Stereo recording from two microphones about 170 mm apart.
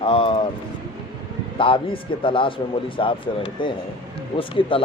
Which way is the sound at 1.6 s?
30° left (ahead or behind).